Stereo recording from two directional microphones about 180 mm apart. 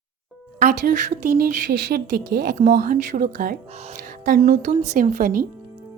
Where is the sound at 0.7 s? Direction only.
60° right (ahead or behind).